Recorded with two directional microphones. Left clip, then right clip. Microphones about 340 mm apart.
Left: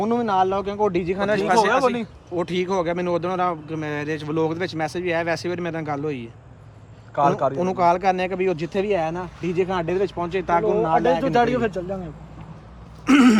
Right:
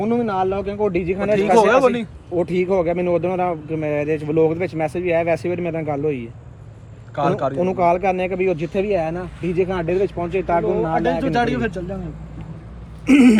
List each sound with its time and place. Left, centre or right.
0.0 s speech: centre
2.7 s speech: left
3.7 s speech: centre
4.3 s speech: left
4.5 s speech: centre
4.9 s speech: left
5.3 s speech: centre
7.2 s speech: centre
7.8 s speech: left
8.8 s speech: centre
10.5 s speech: left
13.1 s speech: centre